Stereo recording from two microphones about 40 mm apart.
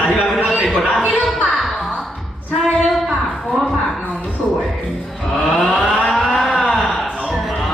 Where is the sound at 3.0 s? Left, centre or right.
Centre.